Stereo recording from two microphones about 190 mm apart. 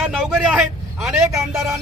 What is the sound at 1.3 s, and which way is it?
Speech, 15° right (ahead or behind).